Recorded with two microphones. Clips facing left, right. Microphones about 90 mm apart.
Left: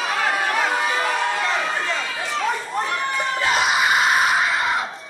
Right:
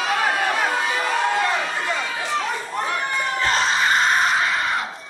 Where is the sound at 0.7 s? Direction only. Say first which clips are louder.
Left 1 dB; 20° left (ahead or behind).